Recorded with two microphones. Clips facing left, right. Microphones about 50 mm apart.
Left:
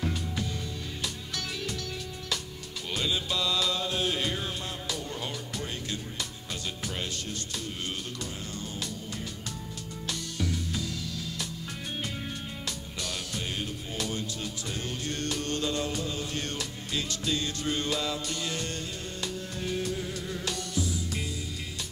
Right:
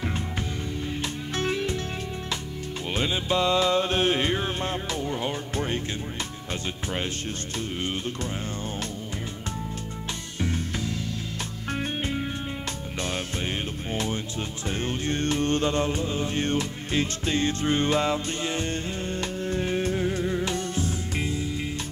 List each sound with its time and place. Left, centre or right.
1.0 s music: right
2.9 s music: right
6.5 s speech: right
10.4 s music: right